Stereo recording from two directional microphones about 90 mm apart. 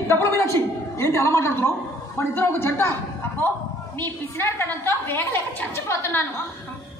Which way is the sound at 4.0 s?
25° left (ahead or behind).